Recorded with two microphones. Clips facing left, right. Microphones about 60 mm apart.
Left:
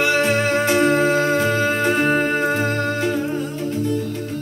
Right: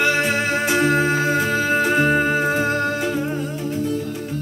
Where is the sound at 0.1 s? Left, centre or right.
Centre.